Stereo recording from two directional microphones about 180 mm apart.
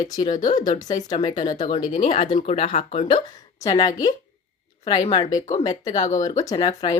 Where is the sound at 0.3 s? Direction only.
40° left (ahead or behind).